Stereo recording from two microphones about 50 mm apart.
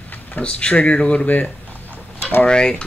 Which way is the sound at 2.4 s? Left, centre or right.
Centre.